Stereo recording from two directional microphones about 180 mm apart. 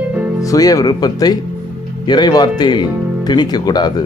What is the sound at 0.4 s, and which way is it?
Speech, 20° left (ahead or behind).